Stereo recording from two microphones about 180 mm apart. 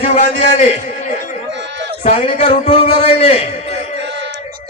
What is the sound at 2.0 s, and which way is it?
A man's voice, 35° left (ahead or behind).